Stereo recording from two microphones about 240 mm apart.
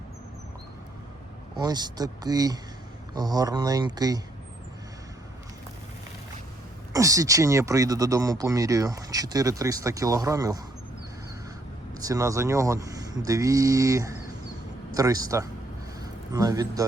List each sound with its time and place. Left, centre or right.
1.5 s speech: centre
6.9 s speech: centre
11.9 s speech: centre
16.0 s a sound: centre